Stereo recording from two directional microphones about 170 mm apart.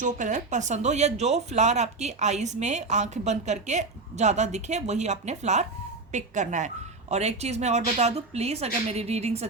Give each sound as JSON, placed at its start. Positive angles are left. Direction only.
{"t": 0.0, "sound": "speech", "side_deg": -45}